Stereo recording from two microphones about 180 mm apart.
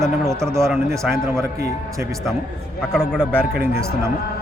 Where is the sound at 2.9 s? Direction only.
5° left (ahead or behind).